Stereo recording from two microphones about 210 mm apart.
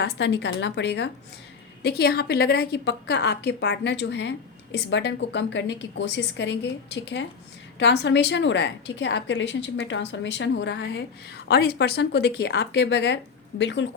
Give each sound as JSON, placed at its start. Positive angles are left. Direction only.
{"t": 0.0, "sound": "a woman's voice", "side_deg": 55}